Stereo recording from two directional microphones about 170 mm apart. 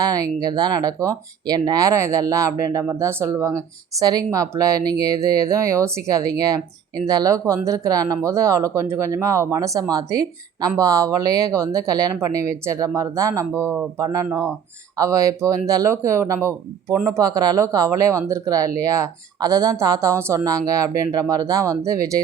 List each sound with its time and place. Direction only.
0.0 s speech: 20° right (ahead or behind)